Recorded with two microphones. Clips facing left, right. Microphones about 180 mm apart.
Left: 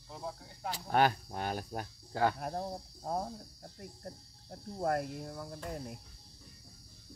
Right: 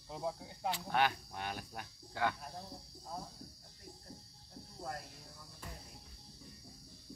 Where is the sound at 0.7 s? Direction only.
40° left (ahead or behind).